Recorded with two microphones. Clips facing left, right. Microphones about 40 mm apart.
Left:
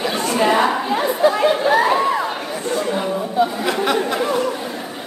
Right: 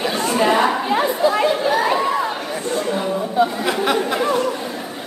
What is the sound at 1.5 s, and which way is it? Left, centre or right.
Speech, left.